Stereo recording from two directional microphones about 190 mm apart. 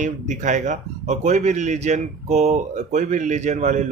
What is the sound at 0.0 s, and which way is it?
Speech, 40° right (ahead or behind).